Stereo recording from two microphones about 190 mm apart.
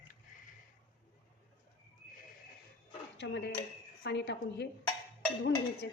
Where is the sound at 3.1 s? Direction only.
65° left (ahead or behind).